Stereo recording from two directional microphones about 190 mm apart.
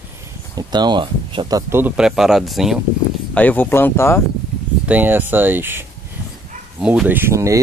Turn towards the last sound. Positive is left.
turn(degrees=-15)  # may be behind; listen again after turning